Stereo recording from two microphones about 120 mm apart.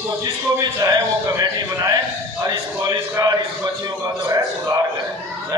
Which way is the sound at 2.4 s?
30° right (ahead or behind).